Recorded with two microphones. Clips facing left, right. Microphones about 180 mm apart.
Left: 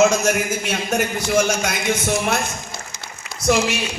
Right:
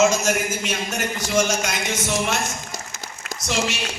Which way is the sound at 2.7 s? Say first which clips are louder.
Even; 45° right (ahead or behind).